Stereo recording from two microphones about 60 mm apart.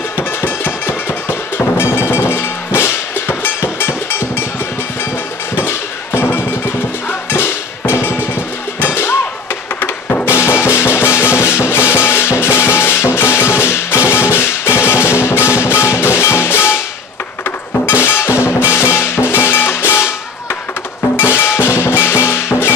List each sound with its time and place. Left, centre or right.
0.4 s a sound: left
1.6 s music: left
5.6 s music: left
9.8 s music: left
10.2 s music: left
17.8 s drum: left
21.2 s music: left